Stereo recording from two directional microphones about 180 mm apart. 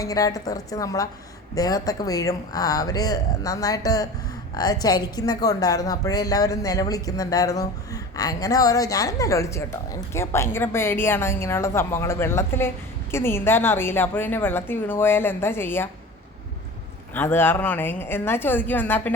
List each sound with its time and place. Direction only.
0.0 s a woman's voice: 20° left (ahead or behind)
17.2 s a woman's voice: 10° left (ahead or behind)